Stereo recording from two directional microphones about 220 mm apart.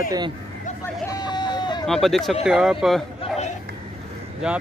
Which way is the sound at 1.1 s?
20° left (ahead or behind).